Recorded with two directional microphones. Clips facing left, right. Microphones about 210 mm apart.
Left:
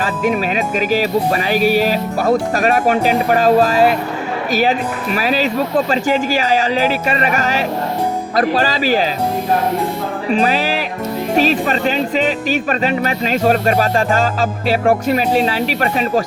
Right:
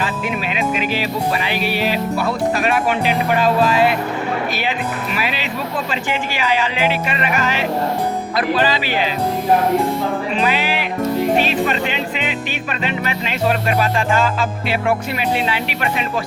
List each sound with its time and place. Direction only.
0.0 s speech: 40° left (ahead or behind)
10.3 s speech: 40° left (ahead or behind)